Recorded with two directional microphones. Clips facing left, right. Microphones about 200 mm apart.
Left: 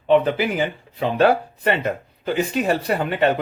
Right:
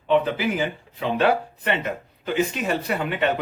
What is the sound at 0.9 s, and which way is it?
A man's voice, 40° left (ahead or behind).